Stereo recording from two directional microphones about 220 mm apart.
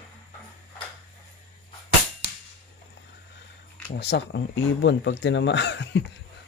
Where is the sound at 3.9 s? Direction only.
50° left (ahead or behind).